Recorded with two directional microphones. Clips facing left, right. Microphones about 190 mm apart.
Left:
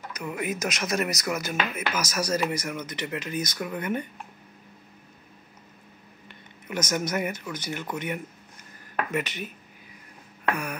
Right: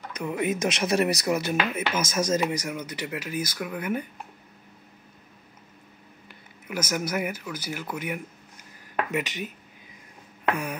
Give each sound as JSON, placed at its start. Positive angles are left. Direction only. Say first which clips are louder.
{"t": 0.1, "sound": "speech", "louder": "right 4 dB", "side_deg": -25}
{"t": 1.6, "sound": "speech", "louder": "right 2 dB", "side_deg": -15}
{"t": 6.2, "sound": "speech", "louder": "even", "side_deg": -5}
{"t": 10.4, "sound": "a sound", "louder": "right 1 dB", "side_deg": -20}